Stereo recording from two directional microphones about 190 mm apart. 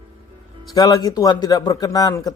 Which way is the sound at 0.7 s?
20° left (ahead or behind).